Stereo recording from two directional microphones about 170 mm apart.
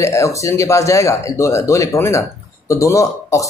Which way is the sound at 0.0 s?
15° left (ahead or behind).